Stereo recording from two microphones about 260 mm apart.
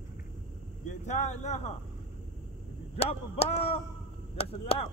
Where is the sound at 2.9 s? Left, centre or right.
Left.